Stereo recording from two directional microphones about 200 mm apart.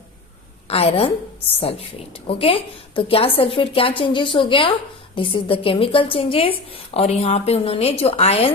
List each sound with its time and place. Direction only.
0.7 s a woman's voice: 30° left (ahead or behind)